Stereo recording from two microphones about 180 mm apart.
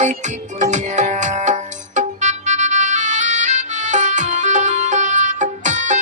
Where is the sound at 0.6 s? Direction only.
40° right (ahead or behind).